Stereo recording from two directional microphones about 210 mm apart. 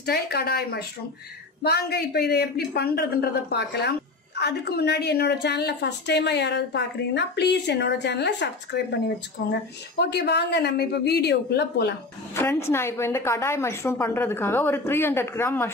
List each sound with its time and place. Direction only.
0.0 s a woman's voice: 50° left (ahead or behind)
12.4 s a woman's voice: 10° left (ahead or behind)